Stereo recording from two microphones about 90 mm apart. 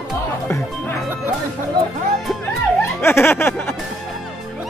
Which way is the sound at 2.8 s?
25° left (ahead or behind).